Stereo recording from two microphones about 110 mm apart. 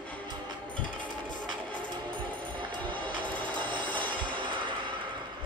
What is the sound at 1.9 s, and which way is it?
Music, 45° right (ahead or behind).